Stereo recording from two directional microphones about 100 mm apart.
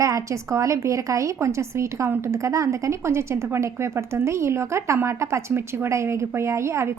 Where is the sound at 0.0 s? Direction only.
30° right (ahead or behind).